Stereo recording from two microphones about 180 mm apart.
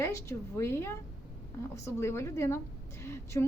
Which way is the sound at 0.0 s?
15° left (ahead or behind).